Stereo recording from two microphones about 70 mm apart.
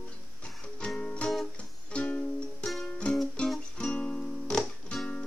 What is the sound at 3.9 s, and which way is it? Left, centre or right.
Music, centre.